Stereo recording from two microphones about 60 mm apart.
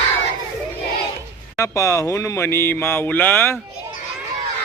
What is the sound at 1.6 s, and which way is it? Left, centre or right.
Speech, left.